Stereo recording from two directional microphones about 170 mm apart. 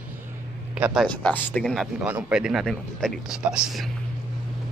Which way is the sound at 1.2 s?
10° left (ahead or behind).